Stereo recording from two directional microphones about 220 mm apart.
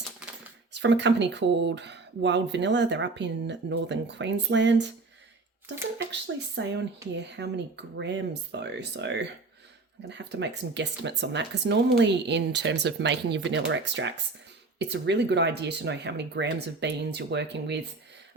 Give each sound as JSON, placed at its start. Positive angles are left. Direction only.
{"t": 0.2, "sound": "typewriter", "side_deg": -5}
{"t": 0.7, "sound": "speech", "side_deg": -55}
{"t": 6.6, "sound": "speech", "side_deg": -55}